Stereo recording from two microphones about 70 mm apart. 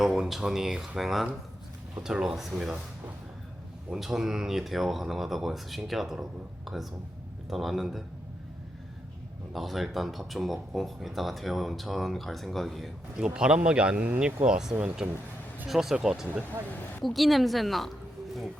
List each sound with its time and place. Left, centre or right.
0.0 s speech: centre
3.8 s speech: centre
9.5 s speech: centre
13.1 s speech: centre
14.4 s speech: centre